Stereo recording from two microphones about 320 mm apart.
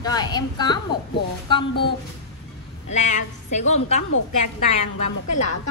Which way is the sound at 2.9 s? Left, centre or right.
Left.